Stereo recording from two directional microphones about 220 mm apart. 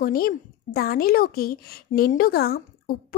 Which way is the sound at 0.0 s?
40° left (ahead or behind).